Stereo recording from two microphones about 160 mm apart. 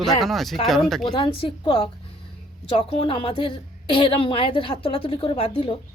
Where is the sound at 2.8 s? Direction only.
30° left (ahead or behind).